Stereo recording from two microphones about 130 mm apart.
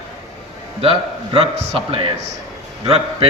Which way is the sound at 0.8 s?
45° right (ahead or behind).